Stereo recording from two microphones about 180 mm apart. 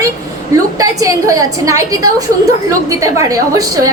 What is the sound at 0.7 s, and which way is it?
A woman's voice, 20° right (ahead or behind).